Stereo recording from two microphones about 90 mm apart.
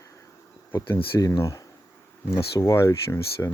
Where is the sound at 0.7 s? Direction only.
25° left (ahead or behind).